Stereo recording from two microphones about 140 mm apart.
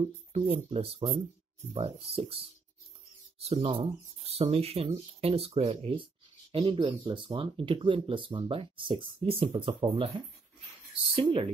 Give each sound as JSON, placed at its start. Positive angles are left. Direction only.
{"t": 0.4, "sound": "speech", "side_deg": -40}
{"t": 11.1, "sound": "speech", "side_deg": -40}